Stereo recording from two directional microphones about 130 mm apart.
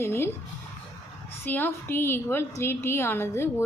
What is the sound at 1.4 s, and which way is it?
A woman's voice, 15° left (ahead or behind).